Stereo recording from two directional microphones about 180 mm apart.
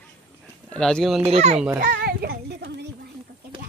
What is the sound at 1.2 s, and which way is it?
Speech, 35° right (ahead or behind).